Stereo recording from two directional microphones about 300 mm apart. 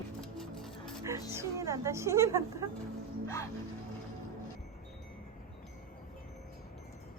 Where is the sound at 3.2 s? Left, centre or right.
Centre.